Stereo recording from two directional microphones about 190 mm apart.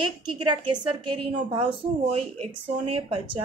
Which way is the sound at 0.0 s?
25° right (ahead or behind).